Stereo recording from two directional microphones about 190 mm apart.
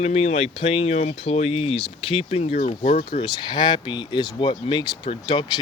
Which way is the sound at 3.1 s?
25° left (ahead or behind).